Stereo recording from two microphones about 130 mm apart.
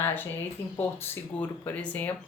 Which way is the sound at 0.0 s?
15° left (ahead or behind).